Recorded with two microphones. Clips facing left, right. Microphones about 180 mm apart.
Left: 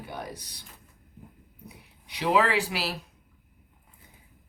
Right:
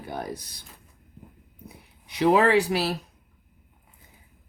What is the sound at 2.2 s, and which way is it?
Speech, 45° right (ahead or behind).